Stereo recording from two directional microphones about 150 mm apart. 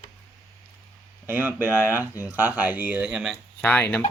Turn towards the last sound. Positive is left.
turn(degrees=10)  # may be behind; listen again after turning